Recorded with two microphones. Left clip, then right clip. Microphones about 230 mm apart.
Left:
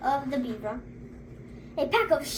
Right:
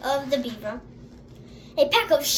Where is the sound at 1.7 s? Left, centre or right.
Right.